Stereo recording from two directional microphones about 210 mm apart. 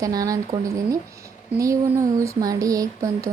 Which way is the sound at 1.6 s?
15° right (ahead or behind).